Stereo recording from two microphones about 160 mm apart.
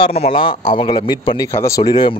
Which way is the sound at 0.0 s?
35° left (ahead or behind).